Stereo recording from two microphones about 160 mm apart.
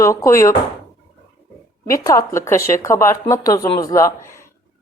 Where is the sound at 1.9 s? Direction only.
20° left (ahead or behind).